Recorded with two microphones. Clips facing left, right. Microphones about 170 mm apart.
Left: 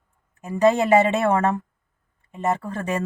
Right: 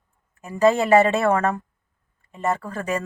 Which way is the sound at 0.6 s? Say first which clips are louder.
Right 1 dB; 20° left (ahead or behind).